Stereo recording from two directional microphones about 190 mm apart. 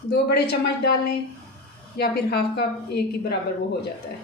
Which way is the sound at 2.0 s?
55° left (ahead or behind).